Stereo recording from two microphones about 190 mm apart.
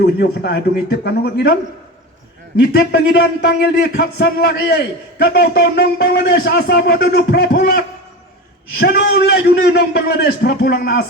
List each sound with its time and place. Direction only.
0.0 s speech: 60° left (ahead or behind)
2.6 s speech: 60° left (ahead or behind)